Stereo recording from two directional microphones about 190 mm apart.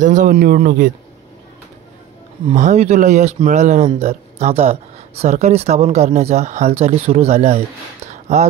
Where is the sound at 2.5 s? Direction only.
40° right (ahead or behind).